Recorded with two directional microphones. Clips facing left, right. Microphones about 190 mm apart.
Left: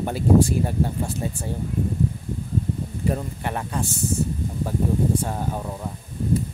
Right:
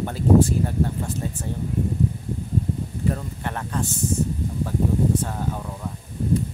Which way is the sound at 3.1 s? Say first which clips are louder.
Left 2 dB; 15° left (ahead or behind).